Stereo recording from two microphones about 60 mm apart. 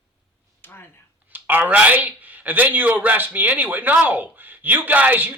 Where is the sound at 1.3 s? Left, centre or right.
Right.